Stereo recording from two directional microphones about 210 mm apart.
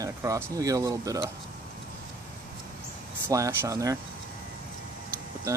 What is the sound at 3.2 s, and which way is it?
Speech, 15° right (ahead or behind).